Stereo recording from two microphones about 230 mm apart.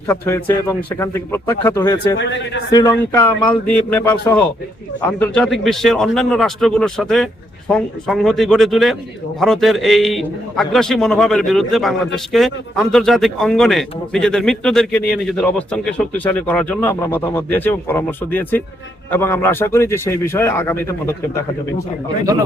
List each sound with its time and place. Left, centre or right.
0.1 s a man's voice: centre
2.1 s speech: left
2.6 s a man's voice: centre